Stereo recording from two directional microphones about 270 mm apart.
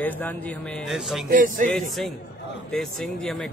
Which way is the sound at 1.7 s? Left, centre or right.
Centre.